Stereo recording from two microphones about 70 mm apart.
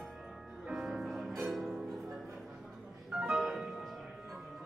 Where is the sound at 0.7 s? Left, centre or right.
Centre.